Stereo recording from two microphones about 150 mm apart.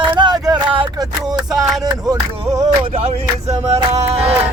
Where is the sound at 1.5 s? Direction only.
25° right (ahead or behind).